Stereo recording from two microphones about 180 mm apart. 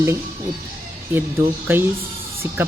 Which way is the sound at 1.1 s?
10° right (ahead or behind).